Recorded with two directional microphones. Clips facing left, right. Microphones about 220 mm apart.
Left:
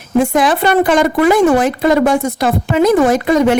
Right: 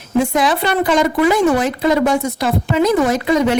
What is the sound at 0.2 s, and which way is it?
A woman's voice, 50° left (ahead or behind).